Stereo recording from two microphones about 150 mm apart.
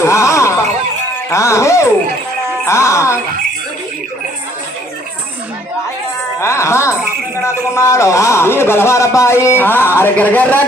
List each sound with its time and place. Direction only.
0.0 s a sound: 20° left (ahead or behind)
1.3 s speech: 20° left (ahead or behind)
6.4 s a man's voice: 20° left (ahead or behind)